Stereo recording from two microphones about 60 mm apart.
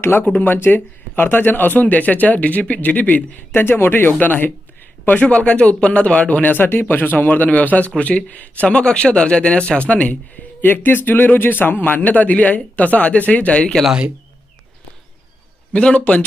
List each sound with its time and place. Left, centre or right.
0.0 s a man's voice: left
3.5 s a man's voice: left
10.6 s a man's voice: left
13.8 s speech: centre
15.7 s a man's voice: left